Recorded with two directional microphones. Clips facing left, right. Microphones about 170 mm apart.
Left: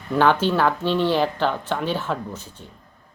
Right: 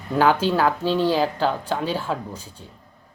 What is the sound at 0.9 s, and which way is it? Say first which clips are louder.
Speech: even; 40° right (ahead or behind).